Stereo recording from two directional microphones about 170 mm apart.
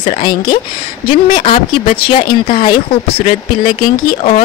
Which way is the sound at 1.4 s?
30° left (ahead or behind).